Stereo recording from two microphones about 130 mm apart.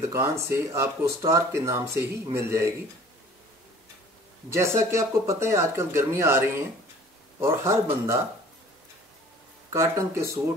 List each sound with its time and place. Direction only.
0.1 s speech: 20° right (ahead or behind)
4.5 s speech: 20° right (ahead or behind)
9.7 s speech: 25° right (ahead or behind)